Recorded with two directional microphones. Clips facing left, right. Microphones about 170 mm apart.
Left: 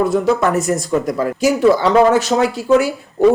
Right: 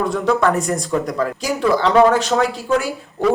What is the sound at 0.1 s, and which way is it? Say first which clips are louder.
Speech: left 2 dB; 5° left (ahead or behind).